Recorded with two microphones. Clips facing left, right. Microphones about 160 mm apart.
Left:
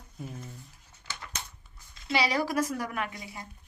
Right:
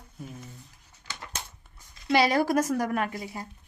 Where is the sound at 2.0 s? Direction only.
50° right (ahead or behind).